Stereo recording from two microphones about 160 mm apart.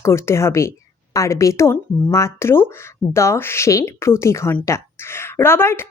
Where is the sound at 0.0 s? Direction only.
15° left (ahead or behind).